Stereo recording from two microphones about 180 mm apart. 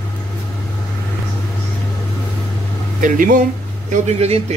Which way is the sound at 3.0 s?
45° right (ahead or behind).